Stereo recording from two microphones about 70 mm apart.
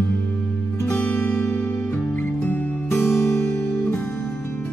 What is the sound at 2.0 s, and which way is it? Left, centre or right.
Music, left.